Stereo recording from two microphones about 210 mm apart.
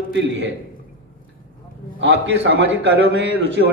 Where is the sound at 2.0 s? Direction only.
55° right (ahead or behind).